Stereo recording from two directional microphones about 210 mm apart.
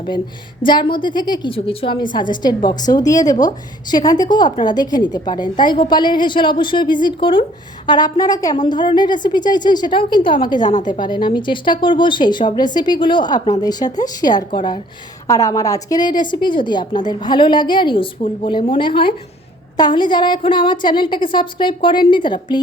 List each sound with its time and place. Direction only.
0.6 s a woman's voice: 20° left (ahead or behind)
10.7 s a woman's voice: 35° left (ahead or behind)
10.9 s a woman's voice: 20° left (ahead or behind)